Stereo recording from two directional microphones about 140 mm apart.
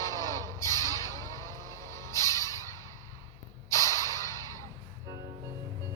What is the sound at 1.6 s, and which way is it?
Music, 20° left (ahead or behind).